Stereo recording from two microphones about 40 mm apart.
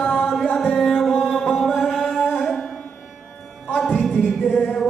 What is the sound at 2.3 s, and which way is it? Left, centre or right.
Music, centre.